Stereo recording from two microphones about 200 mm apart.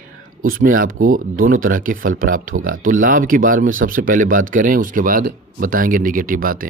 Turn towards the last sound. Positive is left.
turn(degrees=-45)  # may be behind; listen again after turning